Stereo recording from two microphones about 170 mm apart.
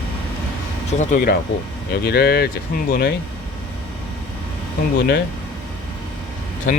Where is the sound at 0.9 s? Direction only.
45° left (ahead or behind).